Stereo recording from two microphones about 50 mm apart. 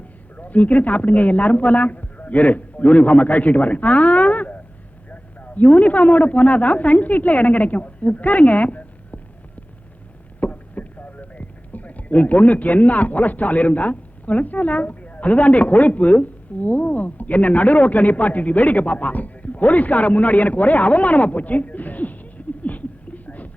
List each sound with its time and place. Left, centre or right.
0.3 s a woman's voice: left
10.4 s speech: left